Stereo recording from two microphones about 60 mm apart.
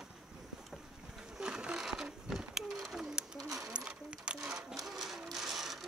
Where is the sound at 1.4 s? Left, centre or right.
Centre.